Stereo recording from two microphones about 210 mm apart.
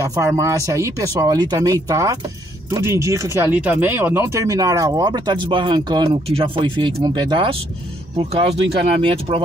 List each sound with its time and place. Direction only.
0.2 s speech: 15° right (ahead or behind)